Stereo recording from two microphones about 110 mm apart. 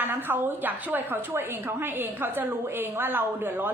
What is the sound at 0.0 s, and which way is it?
A woman's voice, 20° right (ahead or behind).